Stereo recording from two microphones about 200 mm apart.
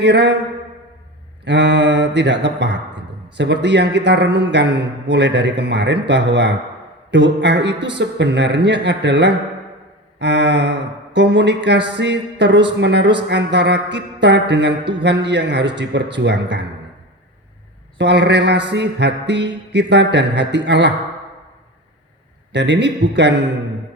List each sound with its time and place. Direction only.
0.0 s speech: 60° right (ahead or behind)
1.5 s speech: 60° right (ahead or behind)
17.9 s speech: 60° right (ahead or behind)
22.5 s speech: 60° right (ahead or behind)